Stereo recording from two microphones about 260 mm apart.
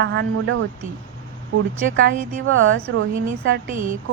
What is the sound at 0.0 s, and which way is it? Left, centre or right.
Speech, right.